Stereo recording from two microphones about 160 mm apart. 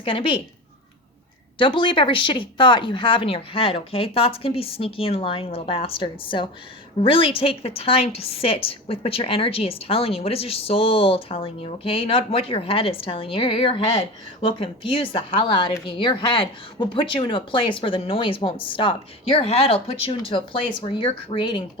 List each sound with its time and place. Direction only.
0.0 s a woman's voice: 35° left (ahead or behind)
1.5 s a woman's voice: 30° left (ahead or behind)